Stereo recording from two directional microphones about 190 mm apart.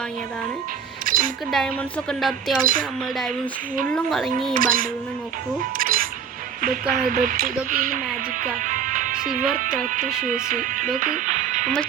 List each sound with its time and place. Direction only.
1.0 s a sound: 45° right (ahead or behind)
1.5 s a woman's voice: centre (ahead or behind)
2.6 s speech: 45° right (ahead or behind)
3.9 s a woman's voice: centre (ahead or behind)
4.5 s speech: 45° right (ahead or behind)
5.7 s music: 45° right (ahead or behind)
6.9 s speech: 45° right (ahead or behind)
8.6 s music: 40° right (ahead or behind)
9.6 s speech: 45° right (ahead or behind)